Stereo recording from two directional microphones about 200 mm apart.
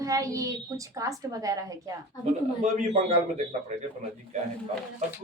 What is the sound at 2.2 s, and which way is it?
A man's voice, 35° right (ahead or behind).